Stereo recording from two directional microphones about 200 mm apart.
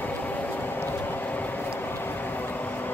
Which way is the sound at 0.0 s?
10° left (ahead or behind).